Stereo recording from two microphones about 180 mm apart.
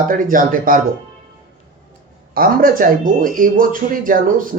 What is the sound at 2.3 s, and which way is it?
A woman's voice, 50° right (ahead or behind).